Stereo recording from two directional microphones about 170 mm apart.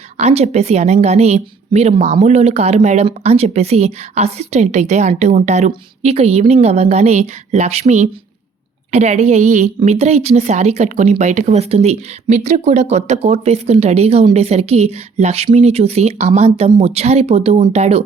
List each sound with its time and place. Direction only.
0.2 s a woman's voice: 40° right (ahead or behind)